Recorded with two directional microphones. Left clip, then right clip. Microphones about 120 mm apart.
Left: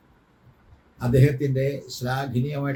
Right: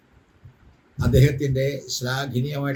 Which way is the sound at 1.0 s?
5° left (ahead or behind).